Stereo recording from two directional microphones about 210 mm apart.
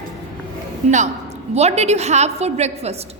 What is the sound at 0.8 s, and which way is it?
A woman's voice, 35° right (ahead or behind).